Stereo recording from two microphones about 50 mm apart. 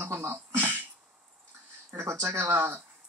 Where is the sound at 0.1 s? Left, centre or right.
Right.